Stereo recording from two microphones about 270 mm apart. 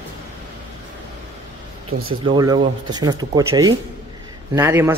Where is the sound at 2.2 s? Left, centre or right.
Centre.